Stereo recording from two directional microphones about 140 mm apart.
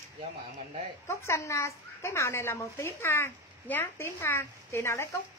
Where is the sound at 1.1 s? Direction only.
20° left (ahead or behind).